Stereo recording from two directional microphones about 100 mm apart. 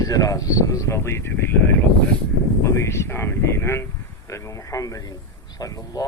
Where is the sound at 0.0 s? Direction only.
35° left (ahead or behind).